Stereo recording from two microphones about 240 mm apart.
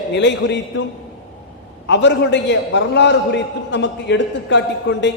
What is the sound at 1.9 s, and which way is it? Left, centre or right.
A man's voice, left.